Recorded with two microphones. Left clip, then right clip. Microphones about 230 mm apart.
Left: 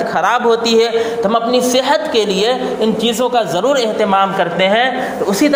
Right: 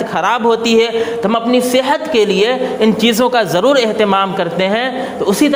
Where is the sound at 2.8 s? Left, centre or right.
Right.